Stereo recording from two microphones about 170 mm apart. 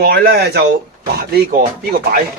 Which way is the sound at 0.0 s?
65° right (ahead or behind).